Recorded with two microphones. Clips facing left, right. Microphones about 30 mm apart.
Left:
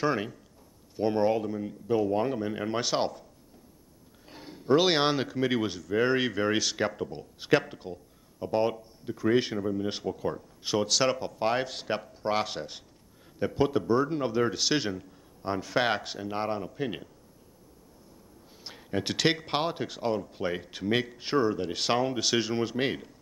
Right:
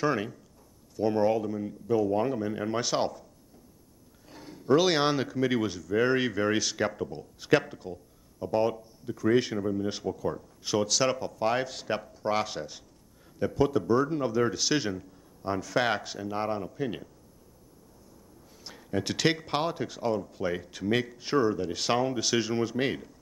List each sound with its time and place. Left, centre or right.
0.0 s speech: centre
4.3 s speech: left
15.4 s speech: left
18.6 s a sound: left
19.1 s speech: centre